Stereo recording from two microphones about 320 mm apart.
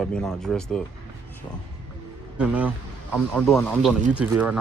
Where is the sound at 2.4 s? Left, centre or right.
Centre.